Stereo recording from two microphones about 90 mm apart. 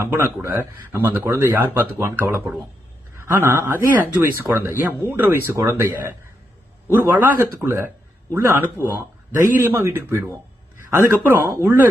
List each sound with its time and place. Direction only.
0.0 s speech: 25° right (ahead or behind)
5.5 s speech: 35° right (ahead or behind)